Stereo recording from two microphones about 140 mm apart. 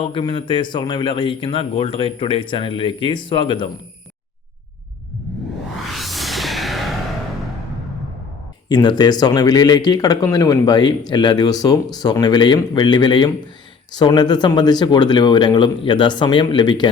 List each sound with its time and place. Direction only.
0.0 s a man's voice: 35° left (ahead or behind)
5.9 s music: centre (ahead or behind)
8.7 s a man's voice: 30° left (ahead or behind)